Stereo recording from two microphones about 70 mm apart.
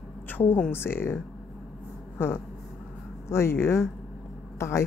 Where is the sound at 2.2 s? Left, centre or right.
Left.